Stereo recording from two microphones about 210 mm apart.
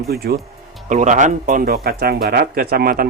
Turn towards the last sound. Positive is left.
turn(degrees=-45)  # may be behind; listen again after turning